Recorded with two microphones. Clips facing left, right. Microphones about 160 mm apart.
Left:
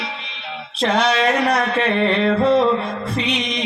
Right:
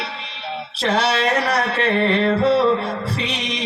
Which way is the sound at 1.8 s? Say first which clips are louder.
Right 2 dB; 35° right (ahead or behind).